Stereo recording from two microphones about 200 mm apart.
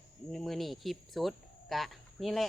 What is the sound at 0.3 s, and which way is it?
Speech, centre (ahead or behind).